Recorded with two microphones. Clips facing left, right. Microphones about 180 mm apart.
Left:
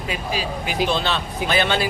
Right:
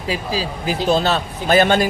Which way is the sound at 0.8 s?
40° right (ahead or behind).